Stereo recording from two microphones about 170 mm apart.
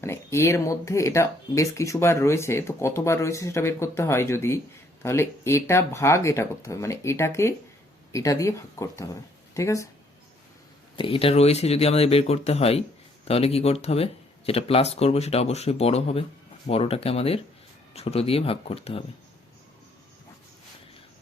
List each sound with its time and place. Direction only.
0.0 s speech: 15° left (ahead or behind)
10.9 s speech: 30° left (ahead or behind)